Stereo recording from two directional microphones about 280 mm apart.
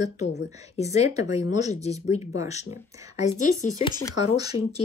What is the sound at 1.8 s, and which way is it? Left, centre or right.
Speech, left.